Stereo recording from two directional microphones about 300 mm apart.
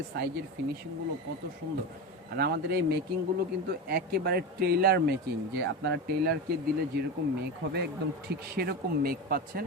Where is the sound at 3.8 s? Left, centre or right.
Right.